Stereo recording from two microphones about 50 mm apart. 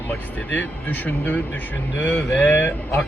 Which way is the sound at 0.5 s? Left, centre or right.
Left.